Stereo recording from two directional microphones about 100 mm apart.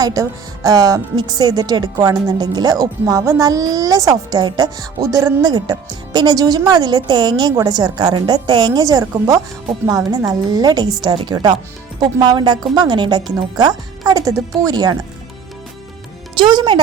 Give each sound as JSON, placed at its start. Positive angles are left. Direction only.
{"t": 0.0, "sound": "a woman's voice", "side_deg": -35}
{"t": 16.4, "sound": "a woman's voice", "side_deg": -50}